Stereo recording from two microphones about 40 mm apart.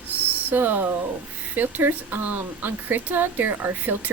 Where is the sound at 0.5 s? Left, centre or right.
Right.